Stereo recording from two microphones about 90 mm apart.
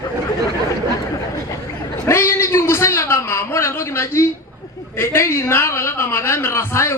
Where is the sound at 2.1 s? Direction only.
30° left (ahead or behind).